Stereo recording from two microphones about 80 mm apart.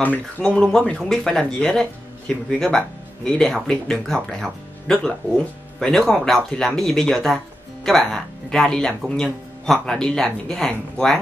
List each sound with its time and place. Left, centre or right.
0.4 s speech: centre